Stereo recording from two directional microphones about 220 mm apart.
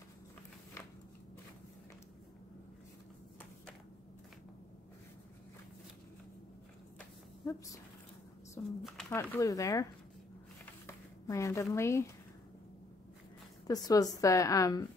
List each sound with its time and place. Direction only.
7.0 s a sound: 15° left (ahead or behind)
8.6 s speech: centre (ahead or behind)
9.1 s a woman's voice: 15° left (ahead or behind)
11.2 s a woman's voice: 15° left (ahead or behind)
13.7 s a woman's voice: 15° left (ahead or behind)